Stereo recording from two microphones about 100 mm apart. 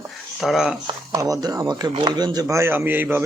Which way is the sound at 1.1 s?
35° right (ahead or behind).